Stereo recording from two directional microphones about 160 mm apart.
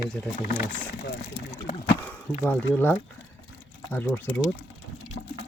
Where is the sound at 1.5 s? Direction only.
30° left (ahead or behind).